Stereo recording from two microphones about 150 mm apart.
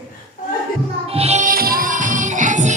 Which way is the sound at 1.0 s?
40° right (ahead or behind).